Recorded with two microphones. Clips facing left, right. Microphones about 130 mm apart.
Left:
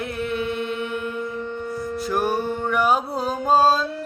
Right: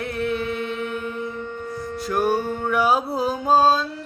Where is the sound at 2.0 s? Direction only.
Centre (ahead or behind).